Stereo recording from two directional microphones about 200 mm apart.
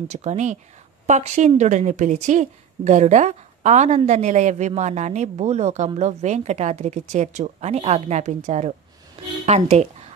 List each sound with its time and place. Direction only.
0.1 s a woman's voice: 35° right (ahead or behind)